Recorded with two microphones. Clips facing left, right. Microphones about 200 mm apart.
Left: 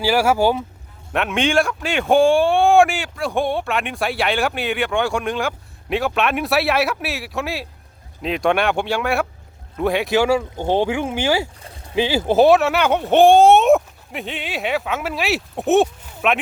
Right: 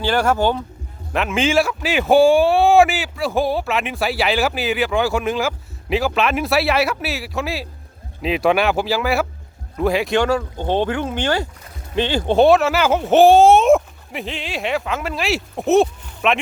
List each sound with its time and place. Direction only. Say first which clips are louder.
0.0 s speech: left 1 dB; 10° left (ahead or behind)